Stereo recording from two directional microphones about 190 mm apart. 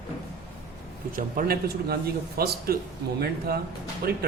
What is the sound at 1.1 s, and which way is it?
A man's voice, 50° right (ahead or behind).